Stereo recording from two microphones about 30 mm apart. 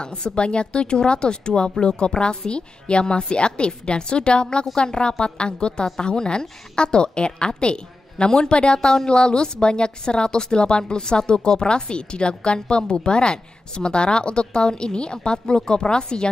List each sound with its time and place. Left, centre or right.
0.0 s a woman's voice: left